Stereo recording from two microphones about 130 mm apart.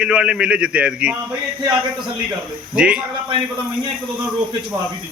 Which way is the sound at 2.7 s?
5° right (ahead or behind).